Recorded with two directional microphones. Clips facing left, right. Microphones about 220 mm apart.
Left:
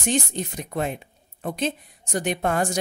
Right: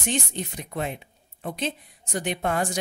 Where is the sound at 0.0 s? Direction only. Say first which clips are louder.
Left 4 dB; 40° left (ahead or behind).